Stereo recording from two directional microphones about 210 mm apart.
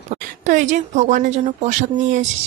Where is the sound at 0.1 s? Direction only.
35° right (ahead or behind).